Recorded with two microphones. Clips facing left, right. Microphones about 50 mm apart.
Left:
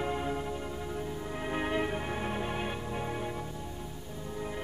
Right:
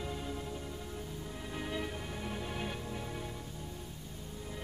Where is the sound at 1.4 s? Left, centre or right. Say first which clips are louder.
Left 8 dB; left.